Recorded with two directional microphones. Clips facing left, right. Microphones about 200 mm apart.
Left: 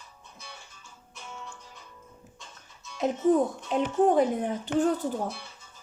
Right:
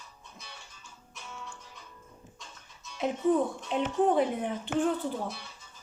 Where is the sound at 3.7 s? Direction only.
45° left (ahead or behind).